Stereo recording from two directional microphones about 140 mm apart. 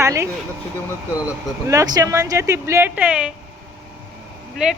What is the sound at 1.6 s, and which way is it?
A woman's voice, 25° right (ahead or behind).